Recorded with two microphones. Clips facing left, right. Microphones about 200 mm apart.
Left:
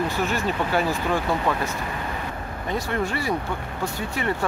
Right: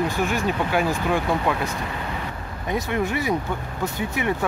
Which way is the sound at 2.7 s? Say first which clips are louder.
Right 2 dB; 15° right (ahead or behind).